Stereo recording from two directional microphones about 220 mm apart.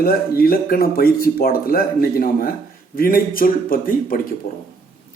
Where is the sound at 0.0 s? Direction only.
45° left (ahead or behind).